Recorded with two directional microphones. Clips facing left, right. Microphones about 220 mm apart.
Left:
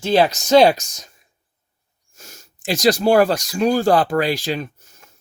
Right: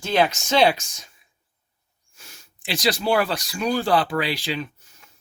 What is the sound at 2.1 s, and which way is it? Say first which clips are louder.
Speech: left 6 dB; 45° left (ahead or behind).